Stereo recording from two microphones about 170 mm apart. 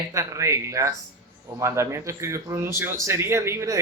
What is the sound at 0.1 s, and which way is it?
Speech, 15° right (ahead or behind).